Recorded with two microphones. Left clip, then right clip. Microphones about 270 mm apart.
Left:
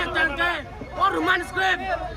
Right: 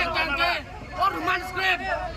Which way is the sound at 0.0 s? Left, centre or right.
Left.